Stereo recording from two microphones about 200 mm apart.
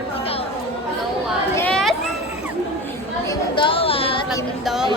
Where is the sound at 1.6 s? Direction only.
5° left (ahead or behind).